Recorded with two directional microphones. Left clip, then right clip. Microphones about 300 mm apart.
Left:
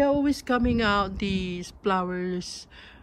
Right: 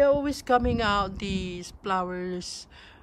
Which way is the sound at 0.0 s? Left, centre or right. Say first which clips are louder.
Right 1 dB; centre.